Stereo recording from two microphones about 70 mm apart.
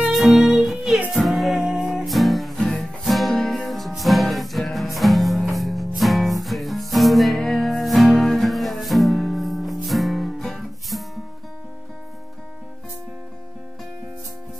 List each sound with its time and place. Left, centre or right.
0.1 s music: centre